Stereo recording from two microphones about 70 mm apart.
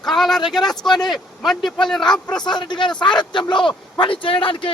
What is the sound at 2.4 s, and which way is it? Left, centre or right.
Speech, left.